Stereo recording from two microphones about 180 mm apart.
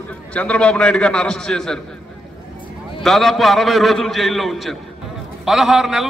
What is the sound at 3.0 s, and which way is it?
A man's voice, centre (ahead or behind).